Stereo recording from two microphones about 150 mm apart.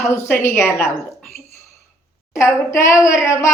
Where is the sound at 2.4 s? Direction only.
20° left (ahead or behind).